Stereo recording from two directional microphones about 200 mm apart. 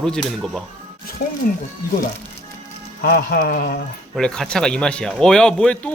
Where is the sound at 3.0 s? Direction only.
45° left (ahead or behind).